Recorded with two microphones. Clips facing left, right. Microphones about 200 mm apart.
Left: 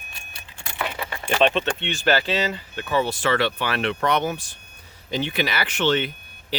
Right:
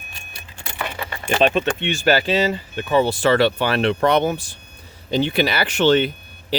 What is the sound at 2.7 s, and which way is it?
Speech, 30° right (ahead or behind).